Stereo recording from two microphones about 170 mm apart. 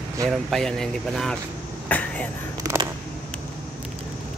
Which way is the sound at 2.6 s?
20° right (ahead or behind).